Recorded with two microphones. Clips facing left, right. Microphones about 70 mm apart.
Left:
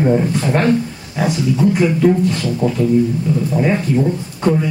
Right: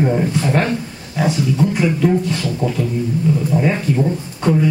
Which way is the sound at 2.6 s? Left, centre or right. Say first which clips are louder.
Left 3 dB; left.